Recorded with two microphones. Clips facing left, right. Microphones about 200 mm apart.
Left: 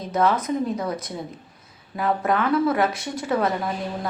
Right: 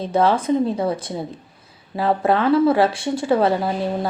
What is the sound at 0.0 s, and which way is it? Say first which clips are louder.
A woman's voice: right 4 dB; 30° right (ahead or behind).